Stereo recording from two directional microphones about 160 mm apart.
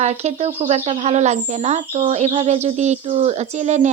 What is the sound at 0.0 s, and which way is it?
Speech, 45° right (ahead or behind).